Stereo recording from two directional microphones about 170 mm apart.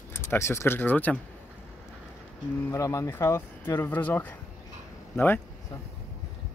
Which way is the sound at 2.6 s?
15° left (ahead or behind).